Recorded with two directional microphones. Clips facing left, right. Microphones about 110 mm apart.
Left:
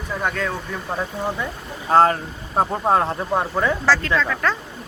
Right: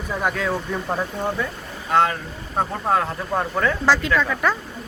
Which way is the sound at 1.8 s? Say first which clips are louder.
Left 4 dB; 35° left (ahead or behind).